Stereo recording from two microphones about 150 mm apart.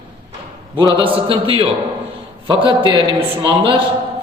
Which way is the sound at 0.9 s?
35° right (ahead or behind).